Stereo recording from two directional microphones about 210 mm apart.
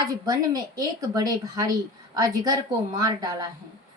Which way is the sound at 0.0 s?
20° right (ahead or behind).